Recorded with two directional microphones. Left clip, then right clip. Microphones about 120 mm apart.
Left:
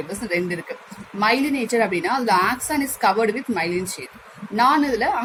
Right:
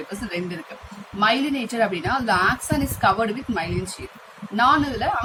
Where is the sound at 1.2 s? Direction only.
40° left (ahead or behind).